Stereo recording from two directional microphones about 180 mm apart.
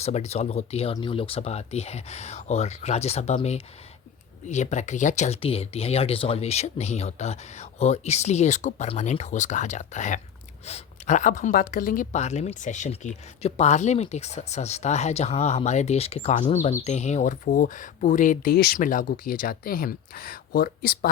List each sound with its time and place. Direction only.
0.0 s a woman's voice: 35° left (ahead or behind); by 21.1 s 55° left (ahead or behind)